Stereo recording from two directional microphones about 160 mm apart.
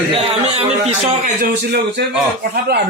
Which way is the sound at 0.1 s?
40° right (ahead or behind).